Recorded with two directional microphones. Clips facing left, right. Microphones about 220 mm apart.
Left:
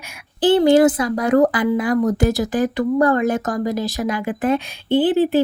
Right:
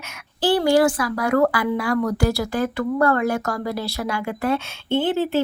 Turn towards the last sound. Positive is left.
turn(degrees=15)  # may be behind; listen again after turning